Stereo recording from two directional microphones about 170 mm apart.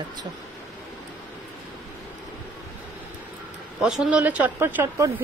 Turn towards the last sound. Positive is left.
turn(degrees=-15)  # may be behind; listen again after turning